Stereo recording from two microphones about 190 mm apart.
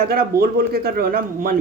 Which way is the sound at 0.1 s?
55° right (ahead or behind).